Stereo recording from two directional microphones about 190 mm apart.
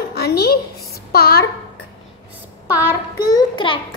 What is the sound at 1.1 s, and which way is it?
Speech, 55° left (ahead or behind).